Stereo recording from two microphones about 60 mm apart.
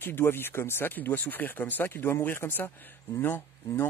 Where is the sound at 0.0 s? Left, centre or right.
Left.